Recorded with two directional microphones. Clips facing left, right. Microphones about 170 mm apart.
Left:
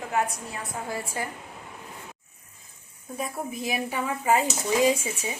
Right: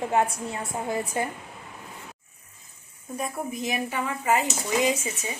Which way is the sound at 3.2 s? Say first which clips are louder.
Right 1 dB; 5° left (ahead or behind).